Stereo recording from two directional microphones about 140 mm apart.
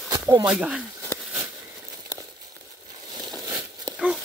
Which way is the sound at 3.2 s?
Centre (ahead or behind).